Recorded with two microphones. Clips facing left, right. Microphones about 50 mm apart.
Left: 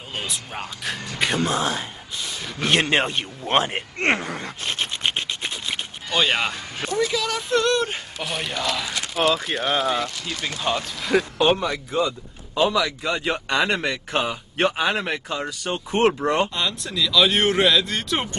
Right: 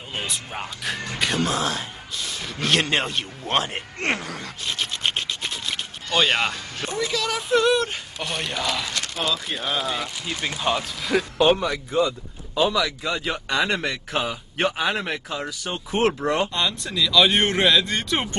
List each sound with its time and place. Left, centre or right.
0.1 s speech: centre
1.2 s speech: centre
1.7 s speech: centre
2.6 s speech: left
5.0 s a sound: centre
6.8 s a sound: left
7.2 s speech: centre
8.9 s a sound: centre
9.7 s speech: centre
10.0 s speech: centre